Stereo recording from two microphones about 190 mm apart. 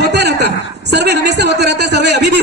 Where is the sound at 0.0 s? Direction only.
60° right (ahead or behind).